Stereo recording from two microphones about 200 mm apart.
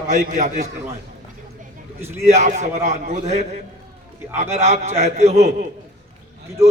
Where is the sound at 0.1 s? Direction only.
40° right (ahead or behind).